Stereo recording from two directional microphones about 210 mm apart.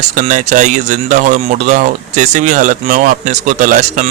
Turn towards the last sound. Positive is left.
turn(degrees=-35)  # may be behind; listen again after turning